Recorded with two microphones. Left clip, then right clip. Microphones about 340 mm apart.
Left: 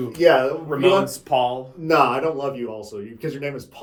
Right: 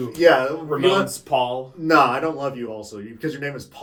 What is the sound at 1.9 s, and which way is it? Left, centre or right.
Speech, right.